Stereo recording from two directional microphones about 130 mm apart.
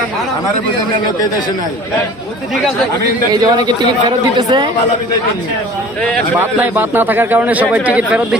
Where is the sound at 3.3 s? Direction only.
35° right (ahead or behind).